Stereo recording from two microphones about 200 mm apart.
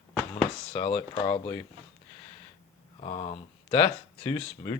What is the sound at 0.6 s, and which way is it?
Speech, 25° left (ahead or behind).